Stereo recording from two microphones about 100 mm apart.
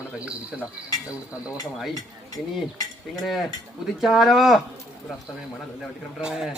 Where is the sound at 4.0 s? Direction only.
Centre (ahead or behind).